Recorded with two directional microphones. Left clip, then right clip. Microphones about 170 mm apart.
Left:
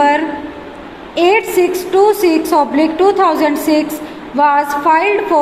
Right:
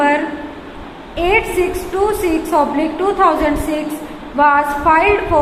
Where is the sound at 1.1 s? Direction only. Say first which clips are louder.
Left 3 dB; 35° left (ahead or behind).